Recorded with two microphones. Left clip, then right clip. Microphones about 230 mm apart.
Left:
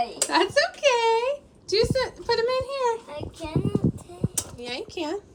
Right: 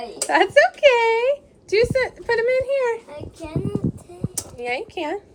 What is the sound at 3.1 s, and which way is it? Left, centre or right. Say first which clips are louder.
Child singing: even; left.